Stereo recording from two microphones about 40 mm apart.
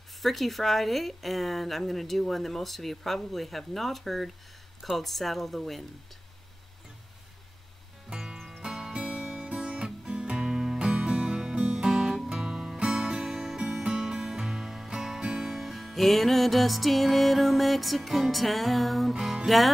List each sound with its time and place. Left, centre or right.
0.2 s speech: centre
8.6 s music: centre
9.0 s music: right
9.8 s music: centre
19.2 s speech: centre